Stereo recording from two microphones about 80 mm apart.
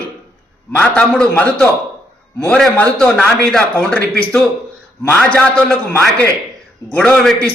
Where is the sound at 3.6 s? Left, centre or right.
Centre.